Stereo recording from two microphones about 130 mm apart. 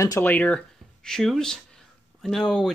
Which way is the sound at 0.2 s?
10° left (ahead or behind).